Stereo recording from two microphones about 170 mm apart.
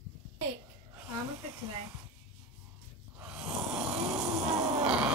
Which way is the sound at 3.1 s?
5° right (ahead or behind).